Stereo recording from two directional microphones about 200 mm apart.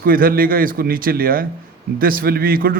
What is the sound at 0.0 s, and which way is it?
A man's voice, 45° right (ahead or behind).